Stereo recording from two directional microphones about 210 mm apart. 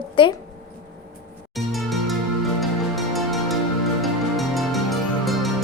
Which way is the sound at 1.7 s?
Centre (ahead or behind).